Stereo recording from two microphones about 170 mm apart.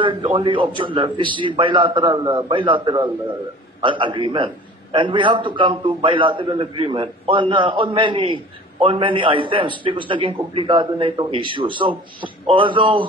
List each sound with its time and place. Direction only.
0.0 s a man's voice: 30° right (ahead or behind)